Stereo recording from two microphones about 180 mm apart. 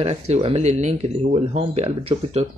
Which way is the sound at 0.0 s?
35° right (ahead or behind).